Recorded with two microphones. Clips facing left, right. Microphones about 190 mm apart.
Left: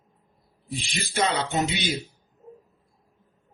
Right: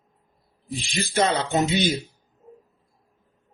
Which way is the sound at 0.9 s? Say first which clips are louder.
Right 3 dB; 45° right (ahead or behind).